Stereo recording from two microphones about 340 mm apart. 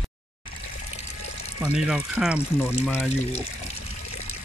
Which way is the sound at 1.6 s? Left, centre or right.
Centre.